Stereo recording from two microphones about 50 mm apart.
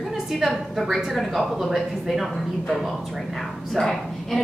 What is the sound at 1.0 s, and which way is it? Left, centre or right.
A woman's voice, centre.